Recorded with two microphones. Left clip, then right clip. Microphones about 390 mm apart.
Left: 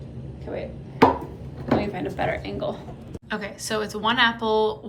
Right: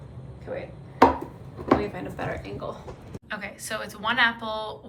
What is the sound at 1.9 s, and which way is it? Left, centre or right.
A woman's voice, centre.